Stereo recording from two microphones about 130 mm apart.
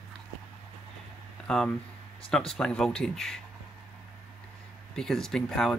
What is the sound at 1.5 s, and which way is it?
Speech, 5° left (ahead or behind).